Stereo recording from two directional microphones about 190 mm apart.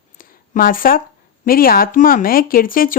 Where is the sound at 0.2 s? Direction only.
45° left (ahead or behind).